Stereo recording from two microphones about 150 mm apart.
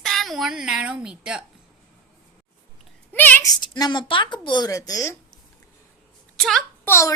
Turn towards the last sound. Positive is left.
turn(degrees=15)  # may be behind; listen again after turning